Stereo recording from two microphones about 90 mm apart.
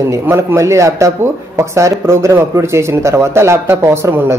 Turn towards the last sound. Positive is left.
turn(degrees=-30)  # may be behind; listen again after turning